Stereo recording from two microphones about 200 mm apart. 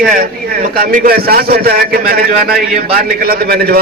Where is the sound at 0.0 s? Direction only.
45° right (ahead or behind).